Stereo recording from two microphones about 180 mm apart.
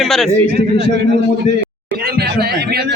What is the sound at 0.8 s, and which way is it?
Speech, 60° right (ahead or behind).